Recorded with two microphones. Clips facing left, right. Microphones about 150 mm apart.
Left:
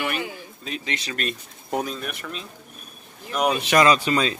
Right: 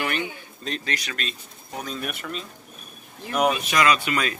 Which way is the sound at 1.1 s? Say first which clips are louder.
Left 5 dB; 50° left (ahead or behind).